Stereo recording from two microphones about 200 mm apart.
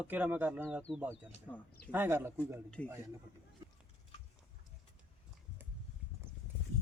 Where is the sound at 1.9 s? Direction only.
10° right (ahead or behind).